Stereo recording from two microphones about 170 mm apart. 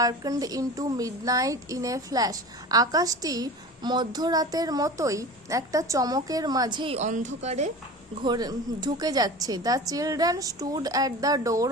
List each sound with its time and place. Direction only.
0.0 s a woman's voice: 20° right (ahead or behind)
7.0 s speech: 45° right (ahead or behind)
8.2 s a woman's voice: 25° right (ahead or behind)